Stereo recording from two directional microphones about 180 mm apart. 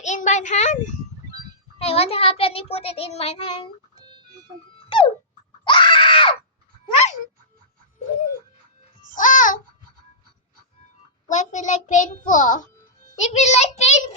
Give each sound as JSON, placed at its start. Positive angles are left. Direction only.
{"t": 0.0, "sound": "a child's voice", "side_deg": 40}
{"t": 4.9, "sound": "dog", "side_deg": 30}
{"t": 5.6, "sound": "screaming", "side_deg": 25}
{"t": 6.9, "sound": "a sound", "side_deg": 35}
{"t": 9.1, "sound": "babbling", "side_deg": 45}
{"t": 11.3, "sound": "a child's voice", "side_deg": 40}